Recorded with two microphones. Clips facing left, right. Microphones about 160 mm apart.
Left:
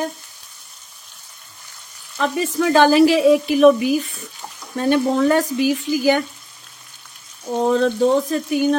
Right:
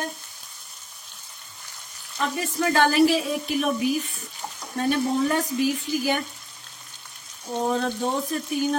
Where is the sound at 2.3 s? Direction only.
90° left.